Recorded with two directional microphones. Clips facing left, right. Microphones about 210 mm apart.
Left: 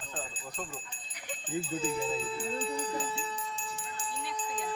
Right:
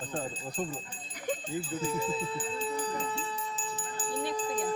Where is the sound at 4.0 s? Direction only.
35° right (ahead or behind).